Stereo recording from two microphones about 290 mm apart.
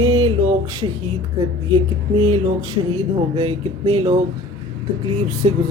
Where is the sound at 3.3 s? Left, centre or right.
Centre.